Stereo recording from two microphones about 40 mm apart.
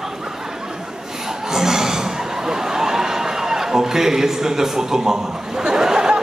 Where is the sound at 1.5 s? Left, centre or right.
Centre.